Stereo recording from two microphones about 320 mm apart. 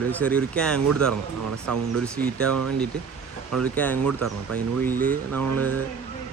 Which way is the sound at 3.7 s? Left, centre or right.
Centre.